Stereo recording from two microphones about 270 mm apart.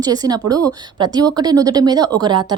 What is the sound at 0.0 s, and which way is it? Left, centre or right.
Speech, centre.